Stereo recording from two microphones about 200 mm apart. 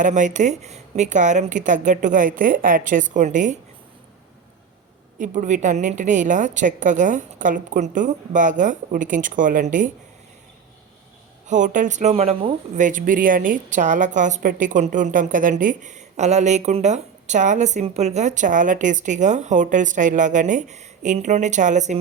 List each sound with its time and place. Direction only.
0.0 s speech: 40° right (ahead or behind)
5.2 s speech: 40° right (ahead or behind)
11.4 s speech: 40° right (ahead or behind)